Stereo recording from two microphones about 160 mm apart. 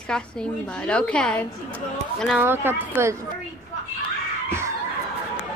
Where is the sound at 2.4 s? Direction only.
15° right (ahead or behind).